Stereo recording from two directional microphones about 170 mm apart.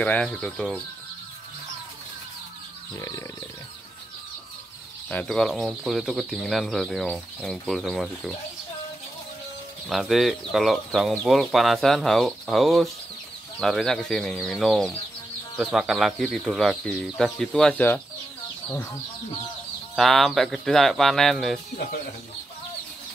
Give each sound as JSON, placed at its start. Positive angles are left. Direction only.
{"t": 0.0, "sound": "speech", "side_deg": 5}
{"t": 3.0, "sound": "speech", "side_deg": 20}
{"t": 5.1, "sound": "speech", "side_deg": 5}
{"t": 9.8, "sound": "speech", "side_deg": 0}
{"t": 20.0, "sound": "speech", "side_deg": 0}